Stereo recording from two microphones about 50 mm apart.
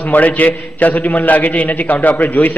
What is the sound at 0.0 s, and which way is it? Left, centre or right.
A man's voice, left.